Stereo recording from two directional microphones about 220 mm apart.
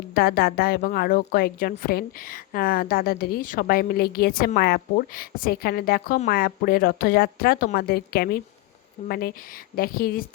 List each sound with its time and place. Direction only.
0.1 s a woman's voice: 45° left (ahead or behind)